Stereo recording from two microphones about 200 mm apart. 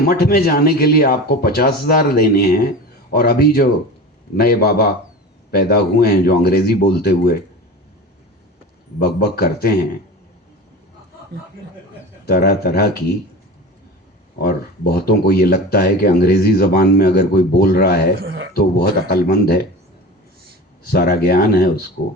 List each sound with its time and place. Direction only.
0.0 s speech: 50° left (ahead or behind)
9.0 s speech: 50° left (ahead or behind)
12.2 s speech: 50° left (ahead or behind)
14.3 s speech: 50° left (ahead or behind)
18.2 s speech: 50° right (ahead or behind)
18.5 s speech: 50° left (ahead or behind)
20.8 s speech: 50° left (ahead or behind)